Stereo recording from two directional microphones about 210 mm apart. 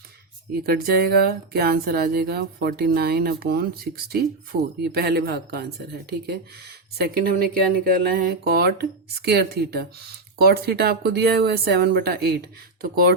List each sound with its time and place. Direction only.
0.6 s speech: 45° right (ahead or behind)